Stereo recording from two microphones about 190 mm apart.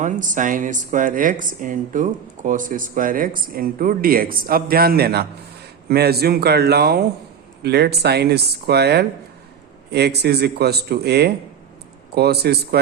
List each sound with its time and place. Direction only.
0.0 s speech: 40° right (ahead or behind); by 12.8 s 60° right (ahead or behind)